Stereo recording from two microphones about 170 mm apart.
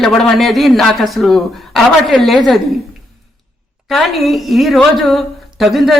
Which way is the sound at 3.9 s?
Centre (ahead or behind).